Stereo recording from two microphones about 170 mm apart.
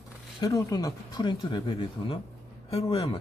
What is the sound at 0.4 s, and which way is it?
Speech, 20° left (ahead or behind).